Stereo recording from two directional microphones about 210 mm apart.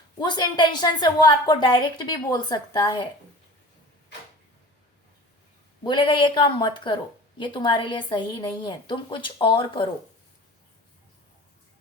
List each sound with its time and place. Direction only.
0.2 s speech: 20° left (ahead or behind)
5.8 s speech: 20° left (ahead or behind)